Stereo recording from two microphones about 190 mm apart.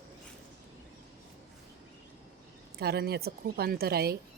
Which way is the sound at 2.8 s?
55° right (ahead or behind).